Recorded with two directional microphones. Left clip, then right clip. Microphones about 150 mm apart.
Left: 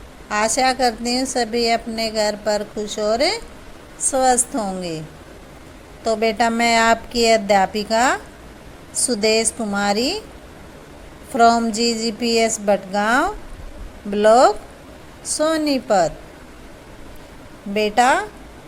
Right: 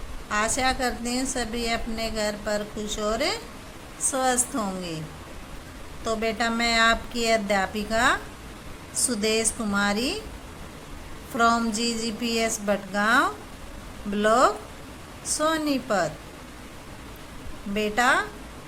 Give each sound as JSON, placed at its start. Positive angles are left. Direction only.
{"t": 0.3, "sound": "a woman's voice", "side_deg": 35}
{"t": 6.1, "sound": "a woman's voice", "side_deg": 35}
{"t": 9.2, "sound": "speech", "side_deg": 30}
{"t": 11.3, "sound": "speech", "side_deg": 30}
{"t": 17.7, "sound": "a woman's voice", "side_deg": 30}